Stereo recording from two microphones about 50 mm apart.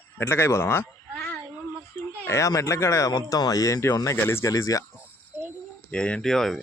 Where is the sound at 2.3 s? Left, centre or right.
Left.